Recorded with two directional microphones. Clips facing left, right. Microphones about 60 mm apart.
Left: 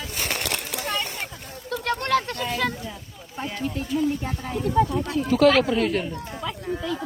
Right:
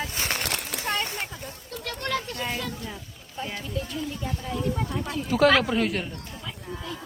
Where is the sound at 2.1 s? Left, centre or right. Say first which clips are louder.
Left 6 dB; left.